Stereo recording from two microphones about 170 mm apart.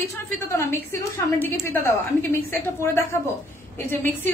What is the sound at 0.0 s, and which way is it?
A woman's voice, 15° left (ahead or behind).